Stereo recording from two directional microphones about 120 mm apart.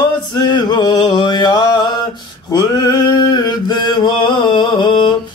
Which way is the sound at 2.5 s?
35° left (ahead or behind).